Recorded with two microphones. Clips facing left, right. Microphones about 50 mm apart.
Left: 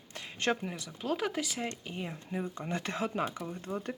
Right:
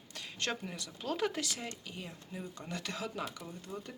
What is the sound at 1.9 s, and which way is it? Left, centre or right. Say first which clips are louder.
Speech: left 7 dB; left.